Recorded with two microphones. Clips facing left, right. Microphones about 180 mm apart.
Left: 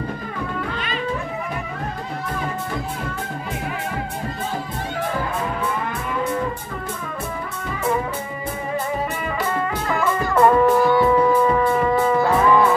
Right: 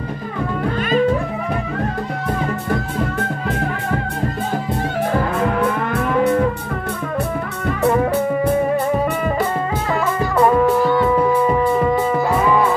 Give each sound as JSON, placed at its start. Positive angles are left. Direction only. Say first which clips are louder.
{"t": 5.4, "sound": "music", "louder": "right 6 dB", "side_deg": -65}
{"t": 10.3, "sound": "music", "louder": "even", "side_deg": -5}
{"t": 10.8, "sound": "music", "louder": "even", "side_deg": 10}
{"t": 11.4, "sound": "music", "louder": "right 2 dB", "side_deg": -10}